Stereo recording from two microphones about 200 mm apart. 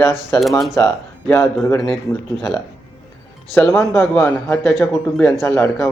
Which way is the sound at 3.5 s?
10° left (ahead or behind).